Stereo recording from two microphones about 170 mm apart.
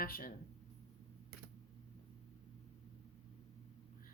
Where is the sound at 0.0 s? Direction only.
55° left (ahead or behind).